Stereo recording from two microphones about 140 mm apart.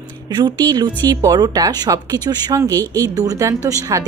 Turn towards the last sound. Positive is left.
turn(degrees=-25)  # may be behind; listen again after turning